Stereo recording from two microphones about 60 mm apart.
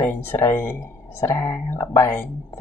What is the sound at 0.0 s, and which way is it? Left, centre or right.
Speech, left.